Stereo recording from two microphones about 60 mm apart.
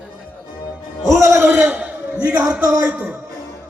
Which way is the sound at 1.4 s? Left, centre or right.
Right.